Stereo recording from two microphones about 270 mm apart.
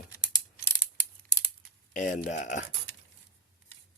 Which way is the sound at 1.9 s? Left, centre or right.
Left.